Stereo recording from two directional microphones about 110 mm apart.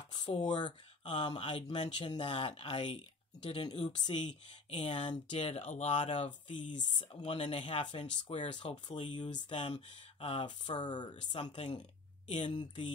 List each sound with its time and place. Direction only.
0.1 s a sound: 45° left (ahead or behind)
0.5 s speech: 45° left (ahead or behind)
5.3 s speech: 70° left (ahead or behind); by 7.5 s 50° left (ahead or behind)
7.5 s speech: 65° left (ahead or behind)
7.8 s speech: 45° left (ahead or behind)
9.8 s speech: 60° left (ahead or behind)
10.8 s speech: 40° left (ahead or behind)
11.4 s speech: 60° left (ahead or behind)
12.3 s speech: 90° left
12.5 s speech: 45° left (ahead or behind)